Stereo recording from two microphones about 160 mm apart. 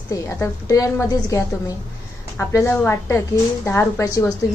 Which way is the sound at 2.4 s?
15° left (ahead or behind).